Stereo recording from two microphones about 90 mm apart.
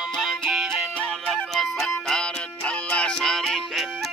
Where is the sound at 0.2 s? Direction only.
5° right (ahead or behind).